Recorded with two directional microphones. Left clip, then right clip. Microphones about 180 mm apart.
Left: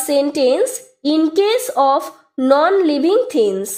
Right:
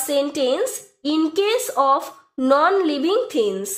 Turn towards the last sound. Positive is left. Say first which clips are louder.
# left 5 dB
turn(degrees=30)  # may be behind; listen again after turning